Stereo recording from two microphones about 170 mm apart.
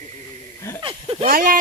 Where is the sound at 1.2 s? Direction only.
55° right (ahead or behind).